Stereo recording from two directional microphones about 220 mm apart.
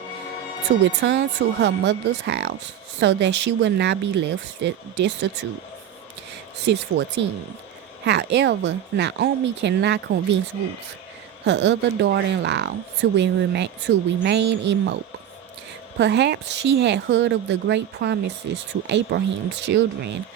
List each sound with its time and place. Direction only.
0.9 s a woman's voice: 55° right (ahead or behind)
6.6 s a woman's voice: 50° right (ahead or behind)
8.0 s a woman's voice: 50° right (ahead or behind)
11.4 s a woman's voice: 55° right (ahead or behind)
16.0 s a woman's voice: 50° right (ahead or behind)